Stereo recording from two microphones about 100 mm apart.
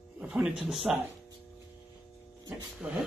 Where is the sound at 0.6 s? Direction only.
Centre (ahead or behind).